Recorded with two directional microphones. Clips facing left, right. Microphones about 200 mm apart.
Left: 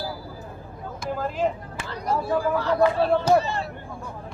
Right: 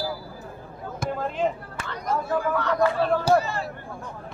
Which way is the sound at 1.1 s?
Centre (ahead or behind).